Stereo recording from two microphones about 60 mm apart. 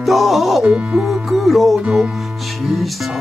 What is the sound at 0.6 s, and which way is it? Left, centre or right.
Speech, centre.